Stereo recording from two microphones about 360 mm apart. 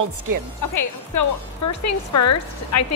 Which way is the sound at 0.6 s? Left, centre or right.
Left.